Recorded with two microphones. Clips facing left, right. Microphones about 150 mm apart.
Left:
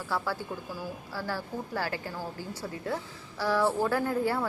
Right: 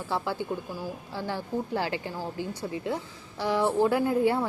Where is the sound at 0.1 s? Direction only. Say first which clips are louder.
Right 3 dB; 20° right (ahead or behind).